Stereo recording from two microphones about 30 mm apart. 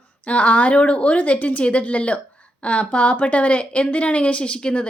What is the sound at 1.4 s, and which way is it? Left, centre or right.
Speech, left.